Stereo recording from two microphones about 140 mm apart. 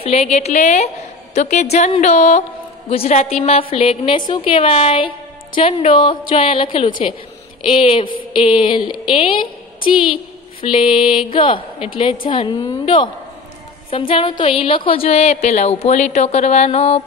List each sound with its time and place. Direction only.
0.0 s a woman's voice: 45° left (ahead or behind)
10.6 s a woman's voice: 40° left (ahead or behind)